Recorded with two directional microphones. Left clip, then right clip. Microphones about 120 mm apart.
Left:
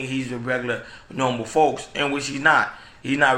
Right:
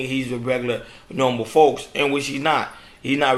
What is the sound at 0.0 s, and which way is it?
Speech, 30° right (ahead or behind).